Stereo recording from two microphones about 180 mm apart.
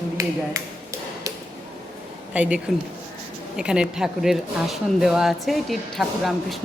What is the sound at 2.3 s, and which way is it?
Speech, 5° right (ahead or behind).